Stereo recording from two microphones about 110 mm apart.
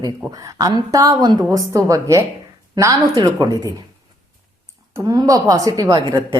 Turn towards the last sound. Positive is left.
turn(degrees=-35)  # may be behind; listen again after turning